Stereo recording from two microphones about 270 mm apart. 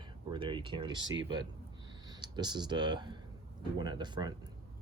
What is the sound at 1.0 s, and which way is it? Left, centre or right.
Speech, right.